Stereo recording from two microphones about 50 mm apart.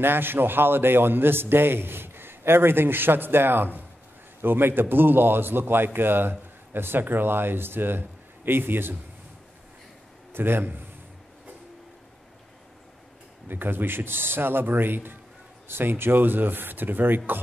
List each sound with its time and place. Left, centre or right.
0.0 s a man's voice: right
10.3 s a man's voice: right
13.5 s a man's voice: right